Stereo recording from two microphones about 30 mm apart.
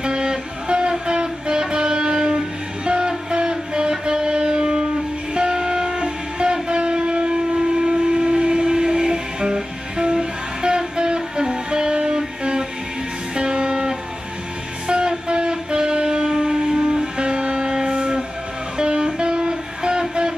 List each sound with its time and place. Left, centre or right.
0.0 s music: right
13.3 s music: right